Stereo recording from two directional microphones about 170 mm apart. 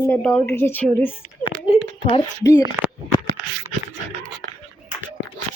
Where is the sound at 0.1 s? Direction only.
5° left (ahead or behind).